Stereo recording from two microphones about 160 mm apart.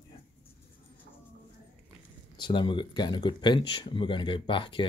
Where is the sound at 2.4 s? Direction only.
30° left (ahead or behind).